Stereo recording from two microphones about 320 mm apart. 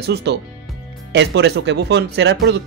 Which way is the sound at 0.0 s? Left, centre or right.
Right.